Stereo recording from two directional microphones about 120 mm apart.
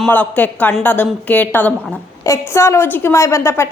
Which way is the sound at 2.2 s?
25° left (ahead or behind).